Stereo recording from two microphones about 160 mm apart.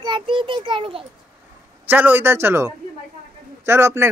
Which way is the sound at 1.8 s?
10° right (ahead or behind).